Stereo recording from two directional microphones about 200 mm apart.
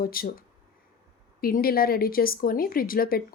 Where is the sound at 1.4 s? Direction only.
45° left (ahead or behind).